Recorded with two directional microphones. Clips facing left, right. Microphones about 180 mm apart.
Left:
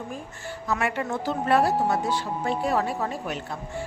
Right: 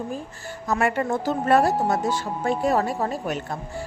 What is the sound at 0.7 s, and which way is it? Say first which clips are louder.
Speech: right 4 dB; 45° right (ahead or behind).